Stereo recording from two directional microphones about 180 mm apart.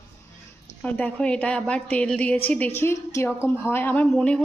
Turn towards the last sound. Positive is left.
turn(degrees=5)  # may be behind; listen again after turning